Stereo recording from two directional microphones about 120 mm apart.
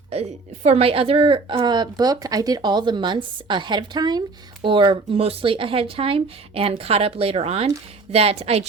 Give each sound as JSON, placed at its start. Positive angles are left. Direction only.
{"t": 0.1, "sound": "a woman's voice", "side_deg": -65}